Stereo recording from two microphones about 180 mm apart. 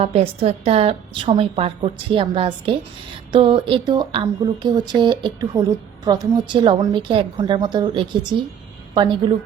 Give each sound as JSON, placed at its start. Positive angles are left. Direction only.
{"t": 0.0, "sound": "a woman's voice", "side_deg": -35}